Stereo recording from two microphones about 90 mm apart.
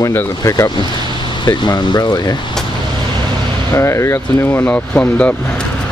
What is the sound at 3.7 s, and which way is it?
Speech, 30° left (ahead or behind).